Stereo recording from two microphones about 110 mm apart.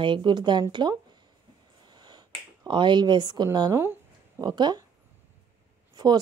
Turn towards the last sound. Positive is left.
turn(degrees=-35)  # may be behind; listen again after turning